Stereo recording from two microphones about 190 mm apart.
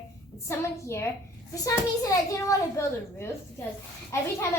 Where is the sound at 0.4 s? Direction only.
15° left (ahead or behind).